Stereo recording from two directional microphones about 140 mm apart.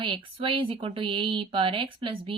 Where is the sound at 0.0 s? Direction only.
40° right (ahead or behind).